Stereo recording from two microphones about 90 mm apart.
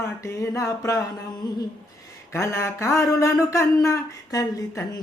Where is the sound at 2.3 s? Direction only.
30° left (ahead or behind).